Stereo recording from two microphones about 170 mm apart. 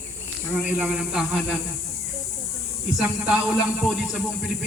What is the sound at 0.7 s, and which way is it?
Speech, 5° right (ahead or behind).